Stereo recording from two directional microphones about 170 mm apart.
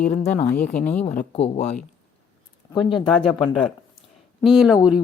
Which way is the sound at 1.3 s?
35° left (ahead or behind).